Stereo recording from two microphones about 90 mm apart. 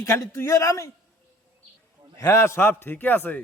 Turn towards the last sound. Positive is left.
turn(degrees=20)  # may be behind; listen again after turning